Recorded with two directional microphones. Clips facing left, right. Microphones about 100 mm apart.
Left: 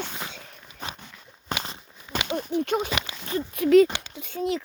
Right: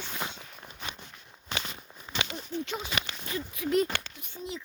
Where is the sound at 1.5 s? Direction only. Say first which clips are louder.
Left 5 dB; 40° left (ahead or behind).